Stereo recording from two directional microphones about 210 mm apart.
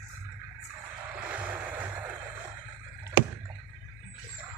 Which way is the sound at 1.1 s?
10° right (ahead or behind).